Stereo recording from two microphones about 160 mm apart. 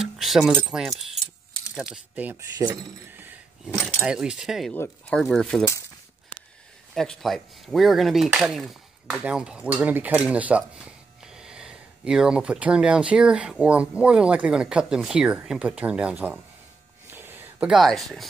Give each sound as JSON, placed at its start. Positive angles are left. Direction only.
{"t": 0.0, "sound": "keys jangling", "side_deg": 0}
{"t": 0.7, "sound": "speech", "side_deg": 0}
{"t": 2.5, "sound": "speech", "side_deg": -20}
{"t": 3.1, "sound": "a sound", "side_deg": -10}
{"t": 3.6, "sound": "speech", "side_deg": 0}
{"t": 4.7, "sound": "speech", "side_deg": 15}
{"t": 5.1, "sound": "speech", "side_deg": 5}
{"t": 6.9, "sound": "speech", "side_deg": 0}
{"t": 17.1, "sound": "a sound", "side_deg": -10}